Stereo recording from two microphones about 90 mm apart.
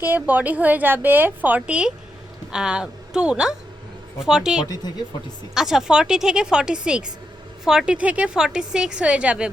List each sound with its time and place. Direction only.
0.0 s a woman's voice: 20° right (ahead or behind)